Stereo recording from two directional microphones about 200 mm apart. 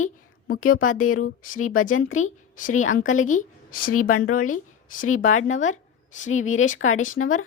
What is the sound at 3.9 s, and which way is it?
Speech, 90° left.